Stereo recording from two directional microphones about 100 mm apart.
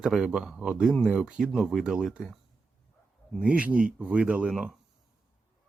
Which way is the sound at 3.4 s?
10° right (ahead or behind).